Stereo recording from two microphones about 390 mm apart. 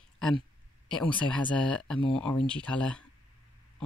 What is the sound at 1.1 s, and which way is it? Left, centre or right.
Speech, centre.